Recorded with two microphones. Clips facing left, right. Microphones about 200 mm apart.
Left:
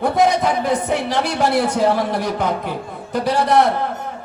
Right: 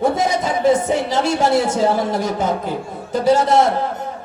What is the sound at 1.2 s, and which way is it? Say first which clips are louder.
A man's voice: right 2 dB; 60° left (ahead or behind).